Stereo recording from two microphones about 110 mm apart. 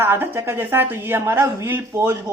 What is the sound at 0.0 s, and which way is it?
Speech, 20° right (ahead or behind).